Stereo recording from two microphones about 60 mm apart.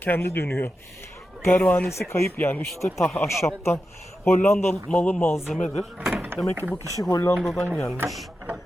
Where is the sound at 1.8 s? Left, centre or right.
Left.